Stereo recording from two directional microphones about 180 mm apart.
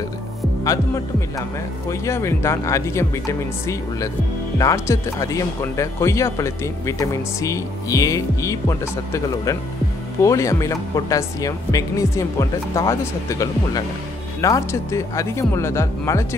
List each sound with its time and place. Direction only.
1.9 s speech: 15° left (ahead or behind)